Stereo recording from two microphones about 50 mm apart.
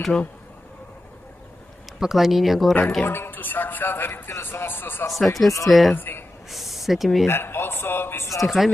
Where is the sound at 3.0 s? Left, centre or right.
Left.